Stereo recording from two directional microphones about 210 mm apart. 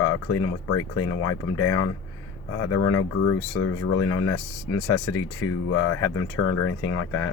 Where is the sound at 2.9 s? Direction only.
90° left.